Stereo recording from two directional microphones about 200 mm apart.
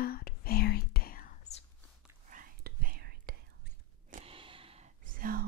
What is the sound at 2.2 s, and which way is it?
Whispering, 45° right (ahead or behind).